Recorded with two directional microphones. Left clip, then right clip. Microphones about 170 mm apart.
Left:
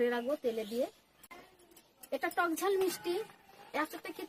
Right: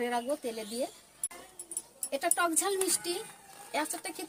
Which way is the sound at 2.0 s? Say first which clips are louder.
Right 3 dB; 5° left (ahead or behind).